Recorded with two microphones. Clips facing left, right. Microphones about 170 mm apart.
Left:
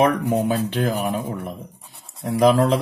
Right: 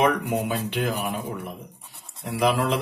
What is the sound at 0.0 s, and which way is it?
Speech, 45° left (ahead or behind).